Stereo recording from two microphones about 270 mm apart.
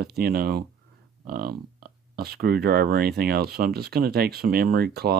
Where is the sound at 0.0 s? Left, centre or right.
Right.